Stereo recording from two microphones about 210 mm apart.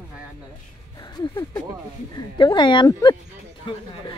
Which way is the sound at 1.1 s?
20° left (ahead or behind).